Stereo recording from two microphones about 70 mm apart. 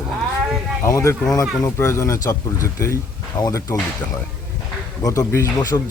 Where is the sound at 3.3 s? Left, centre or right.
Left.